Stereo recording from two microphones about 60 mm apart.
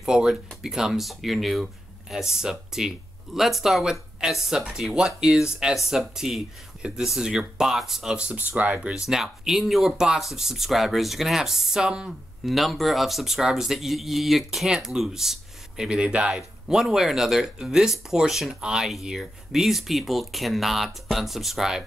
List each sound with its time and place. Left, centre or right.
0.0 s speech: centre
8.4 s speech: right
9.0 s speech: centre
12.4 s speech: centre